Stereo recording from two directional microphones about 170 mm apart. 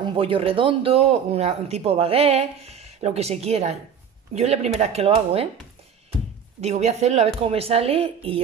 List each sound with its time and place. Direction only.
0.0 s speech: 30° right (ahead or behind)
6.6 s speech: 40° right (ahead or behind)